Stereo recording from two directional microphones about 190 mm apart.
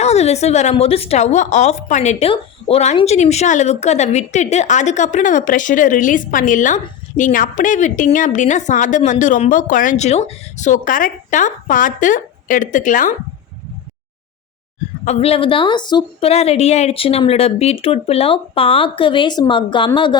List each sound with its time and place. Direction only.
0.0 s a woman's voice: 35° left (ahead or behind)
15.0 s a woman's voice: 35° left (ahead or behind)